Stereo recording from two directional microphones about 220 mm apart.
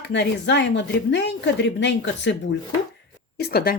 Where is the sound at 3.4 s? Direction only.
45° left (ahead or behind).